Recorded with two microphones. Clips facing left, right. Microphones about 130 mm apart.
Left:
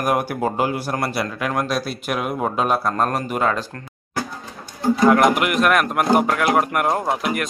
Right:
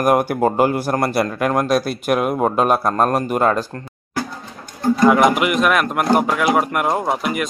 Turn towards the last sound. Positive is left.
turn(degrees=0)  # may be behind; listen again after turning